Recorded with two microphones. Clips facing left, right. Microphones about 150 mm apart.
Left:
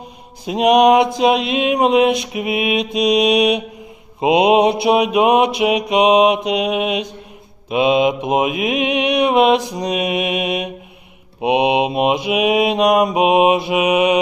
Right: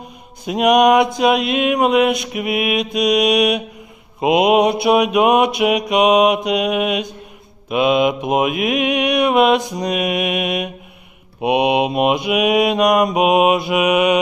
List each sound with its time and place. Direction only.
0.4 s mantra: 30° left (ahead or behind)